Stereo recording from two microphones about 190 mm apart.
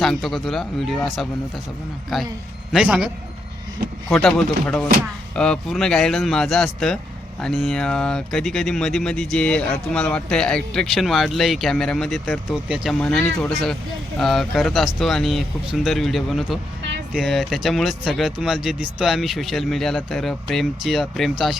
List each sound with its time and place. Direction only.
0.0 s speech: centre (ahead or behind)
4.1 s speech: 5° left (ahead or behind)